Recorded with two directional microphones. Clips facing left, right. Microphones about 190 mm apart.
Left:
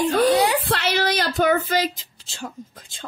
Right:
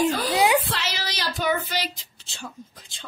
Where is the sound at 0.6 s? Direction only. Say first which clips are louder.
Left 9 dB; 60° left (ahead or behind).